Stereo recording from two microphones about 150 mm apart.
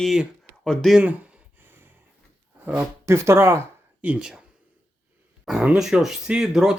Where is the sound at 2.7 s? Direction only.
20° right (ahead or behind).